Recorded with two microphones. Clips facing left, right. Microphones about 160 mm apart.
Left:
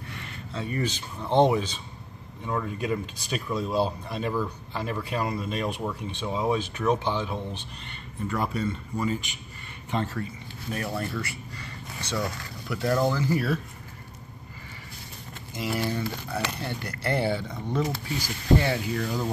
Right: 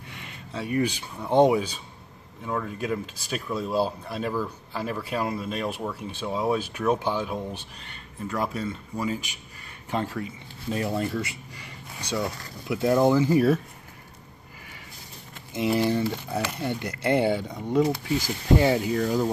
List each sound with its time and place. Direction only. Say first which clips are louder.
0.1 s speech: right 1 dB; 15° right (ahead or behind)
10.2 s speech: right 2 dB; 20° right (ahead or behind)
15.5 s speech: right 6 dB; 25° right (ahead or behind)